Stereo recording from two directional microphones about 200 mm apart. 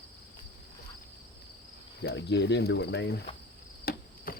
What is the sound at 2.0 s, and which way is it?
Speech, 55° left (ahead or behind).